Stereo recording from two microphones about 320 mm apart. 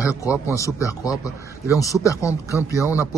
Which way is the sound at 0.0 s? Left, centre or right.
Centre.